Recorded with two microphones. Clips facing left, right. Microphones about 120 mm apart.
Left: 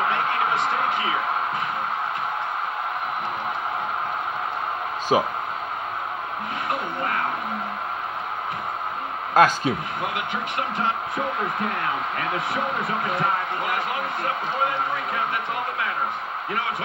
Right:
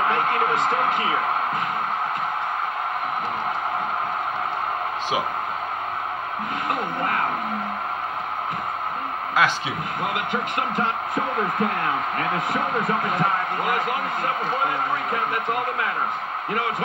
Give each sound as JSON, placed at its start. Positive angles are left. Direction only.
{"t": 0.1, "sound": "speech", "side_deg": -45}
{"t": 5.1, "sound": "speech", "side_deg": 40}
{"t": 9.3, "sound": "a man's voice", "side_deg": 45}
{"t": 10.1, "sound": "speech", "side_deg": -45}
{"t": 12.4, "sound": "speech", "side_deg": -45}